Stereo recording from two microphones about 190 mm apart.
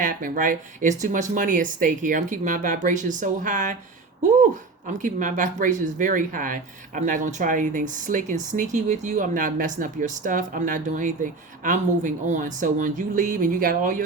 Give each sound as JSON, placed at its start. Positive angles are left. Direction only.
{"t": 0.0, "sound": "speech", "side_deg": -45}
{"t": 4.2, "sound": "a sound", "side_deg": -40}
{"t": 4.9, "sound": "speech", "side_deg": -40}